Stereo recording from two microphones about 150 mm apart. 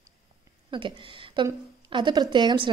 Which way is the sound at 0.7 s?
35° right (ahead or behind).